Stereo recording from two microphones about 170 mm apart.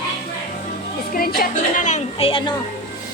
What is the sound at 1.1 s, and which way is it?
Speech, 60° left (ahead or behind).